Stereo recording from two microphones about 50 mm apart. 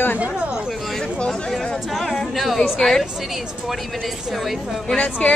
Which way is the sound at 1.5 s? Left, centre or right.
Centre.